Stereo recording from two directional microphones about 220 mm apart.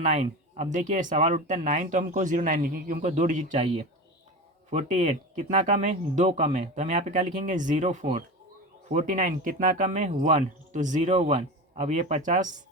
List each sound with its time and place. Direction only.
0.0 s speech: 30° right (ahead or behind)